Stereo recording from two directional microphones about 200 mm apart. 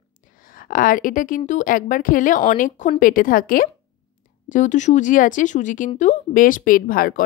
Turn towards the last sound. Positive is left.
turn(degrees=45)  # may be behind; listen again after turning